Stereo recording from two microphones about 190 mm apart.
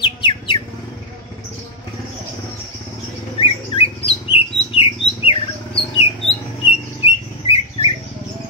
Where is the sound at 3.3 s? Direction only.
30° left (ahead or behind).